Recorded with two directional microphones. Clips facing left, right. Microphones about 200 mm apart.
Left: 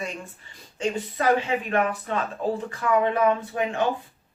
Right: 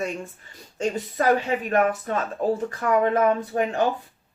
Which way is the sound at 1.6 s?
40° right (ahead or behind).